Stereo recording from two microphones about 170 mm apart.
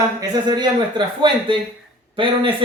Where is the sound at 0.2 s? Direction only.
25° right (ahead or behind).